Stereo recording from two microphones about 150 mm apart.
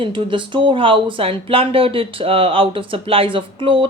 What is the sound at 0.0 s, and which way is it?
A woman's voice, 35° right (ahead or behind).